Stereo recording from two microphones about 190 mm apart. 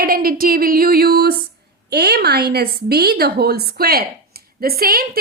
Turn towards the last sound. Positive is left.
turn(degrees=-50)  # may be behind; listen again after turning